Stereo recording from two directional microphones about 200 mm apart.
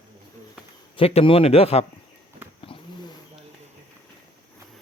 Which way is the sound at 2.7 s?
25° left (ahead or behind).